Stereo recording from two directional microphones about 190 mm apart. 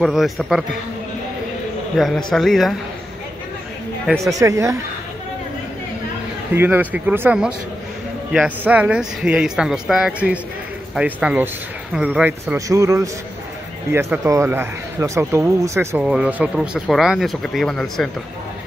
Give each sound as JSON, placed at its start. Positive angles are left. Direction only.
{"t": 0.0, "sound": "speech", "side_deg": 0}
{"t": 2.0, "sound": "speech", "side_deg": 0}
{"t": 4.2, "sound": "a man's voice", "side_deg": -15}
{"t": 6.5, "sound": "a man's voice", "side_deg": -10}
{"t": 8.6, "sound": "a man's voice", "side_deg": -5}